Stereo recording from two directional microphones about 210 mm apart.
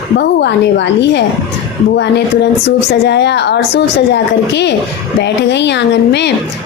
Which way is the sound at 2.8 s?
55° left (ahead or behind).